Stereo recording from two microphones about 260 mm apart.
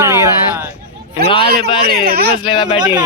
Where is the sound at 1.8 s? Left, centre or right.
Right.